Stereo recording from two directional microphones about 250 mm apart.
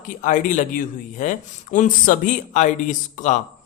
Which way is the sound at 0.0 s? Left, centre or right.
Left.